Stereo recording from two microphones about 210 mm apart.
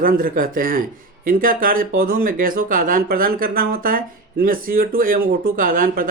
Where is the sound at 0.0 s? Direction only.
45° right (ahead or behind).